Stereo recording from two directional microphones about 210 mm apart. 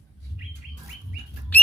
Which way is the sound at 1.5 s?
10° left (ahead or behind).